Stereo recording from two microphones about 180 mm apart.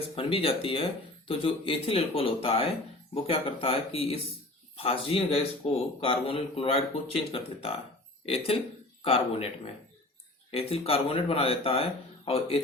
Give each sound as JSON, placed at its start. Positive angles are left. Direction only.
{"t": 0.2, "sound": "speech", "side_deg": 30}
{"t": 10.5, "sound": "speech", "side_deg": 30}